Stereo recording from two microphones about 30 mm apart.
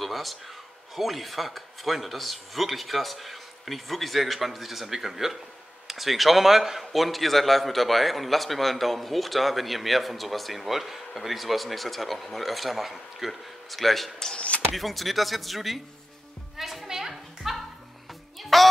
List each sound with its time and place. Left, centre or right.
0.0 s a sound: centre
0.9 s a man's voice: centre
16.5 s music: centre
17.4 s music: centre